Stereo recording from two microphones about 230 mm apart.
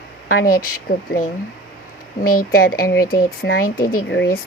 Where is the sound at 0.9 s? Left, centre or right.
Left.